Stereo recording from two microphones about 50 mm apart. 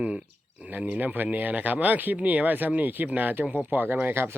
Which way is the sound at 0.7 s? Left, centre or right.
Right.